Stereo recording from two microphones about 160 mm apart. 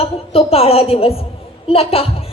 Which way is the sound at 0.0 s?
40° left (ahead or behind).